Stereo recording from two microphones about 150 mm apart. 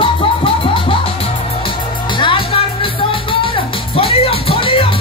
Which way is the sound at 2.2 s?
35° left (ahead or behind).